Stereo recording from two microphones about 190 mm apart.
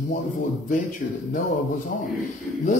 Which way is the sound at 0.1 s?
45° left (ahead or behind).